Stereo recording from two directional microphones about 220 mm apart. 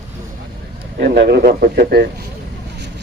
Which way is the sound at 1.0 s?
50° right (ahead or behind).